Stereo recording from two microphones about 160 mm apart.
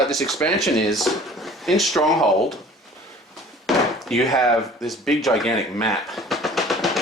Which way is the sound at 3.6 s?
Centre (ahead or behind).